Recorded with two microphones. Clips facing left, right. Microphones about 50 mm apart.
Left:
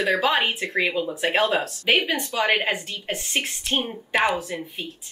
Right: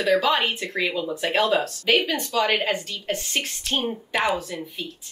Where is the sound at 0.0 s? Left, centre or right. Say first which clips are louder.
Right 1 dB; left.